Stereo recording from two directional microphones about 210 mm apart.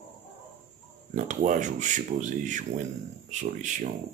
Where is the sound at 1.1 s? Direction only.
35° right (ahead or behind).